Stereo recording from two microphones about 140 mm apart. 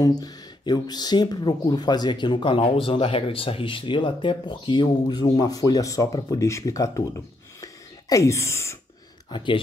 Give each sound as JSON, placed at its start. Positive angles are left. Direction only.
{"t": 0.0, "sound": "speech", "side_deg": 30}
{"t": 9.3, "sound": "speech", "side_deg": 35}